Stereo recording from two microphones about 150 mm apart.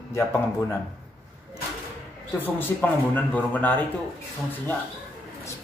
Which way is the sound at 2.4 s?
10° left (ahead or behind).